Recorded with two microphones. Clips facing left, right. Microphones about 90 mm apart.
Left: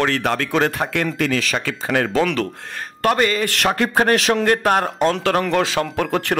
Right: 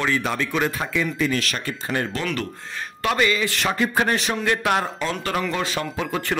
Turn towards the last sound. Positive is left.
turn(degrees=60)  # may be behind; listen again after turning